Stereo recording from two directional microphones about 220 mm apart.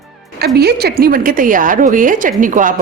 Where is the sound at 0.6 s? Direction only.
45° right (ahead or behind).